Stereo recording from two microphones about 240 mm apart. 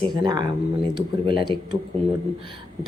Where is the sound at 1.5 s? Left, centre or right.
Right.